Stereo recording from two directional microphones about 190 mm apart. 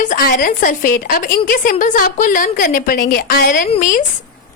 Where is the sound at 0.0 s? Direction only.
45° left (ahead or behind).